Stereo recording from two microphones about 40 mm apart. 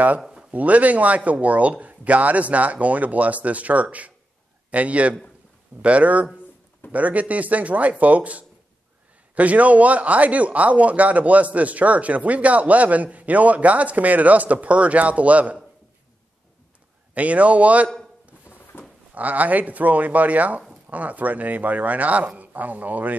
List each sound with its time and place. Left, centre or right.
0.5 s a man's voice: right
17.1 s speech: right
18.5 s a sound: left
19.1 s speech: right